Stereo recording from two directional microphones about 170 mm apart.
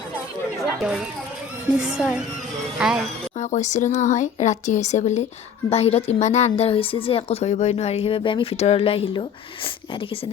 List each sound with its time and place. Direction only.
0.8 s speech: 5° right (ahead or behind)
3.3 s a woman's voice: 45° left (ahead or behind)